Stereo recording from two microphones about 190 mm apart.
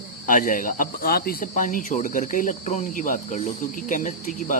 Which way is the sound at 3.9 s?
40° left (ahead or behind).